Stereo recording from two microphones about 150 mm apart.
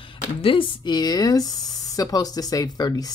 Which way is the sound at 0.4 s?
35° left (ahead or behind).